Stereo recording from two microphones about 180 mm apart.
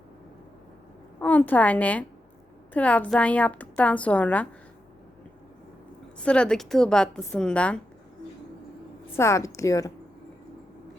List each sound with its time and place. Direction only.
1.2 s a woman's voice: 10° left (ahead or behind)
6.2 s a woman's voice: 5° left (ahead or behind)
9.1 s a woman's voice: 15° left (ahead or behind)